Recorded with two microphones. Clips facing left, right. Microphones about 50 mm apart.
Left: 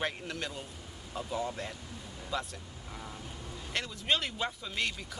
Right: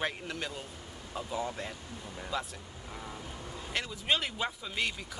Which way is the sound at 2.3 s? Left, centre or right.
Centre.